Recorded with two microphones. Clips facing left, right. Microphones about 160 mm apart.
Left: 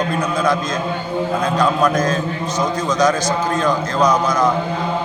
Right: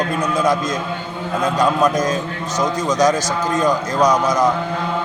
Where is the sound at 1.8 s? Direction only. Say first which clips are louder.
Even; 15° right (ahead or behind).